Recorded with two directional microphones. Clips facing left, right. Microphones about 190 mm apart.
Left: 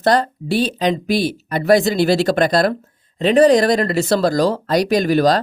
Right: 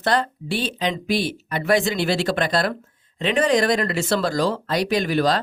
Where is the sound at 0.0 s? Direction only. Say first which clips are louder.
Left 6 dB; 40° left (ahead or behind).